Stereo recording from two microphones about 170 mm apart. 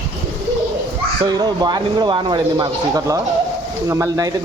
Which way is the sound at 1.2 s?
25° right (ahead or behind).